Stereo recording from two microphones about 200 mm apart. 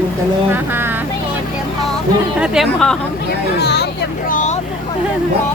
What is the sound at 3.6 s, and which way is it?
Speech, 55° left (ahead or behind).